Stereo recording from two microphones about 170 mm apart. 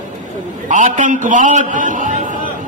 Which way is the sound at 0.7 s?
45° right (ahead or behind).